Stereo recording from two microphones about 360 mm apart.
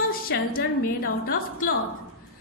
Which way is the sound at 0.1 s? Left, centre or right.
Left.